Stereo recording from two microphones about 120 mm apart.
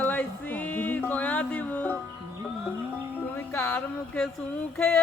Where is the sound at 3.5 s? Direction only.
20° left (ahead or behind).